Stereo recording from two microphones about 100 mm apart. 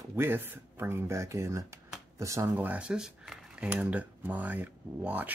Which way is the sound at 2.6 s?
15° right (ahead or behind).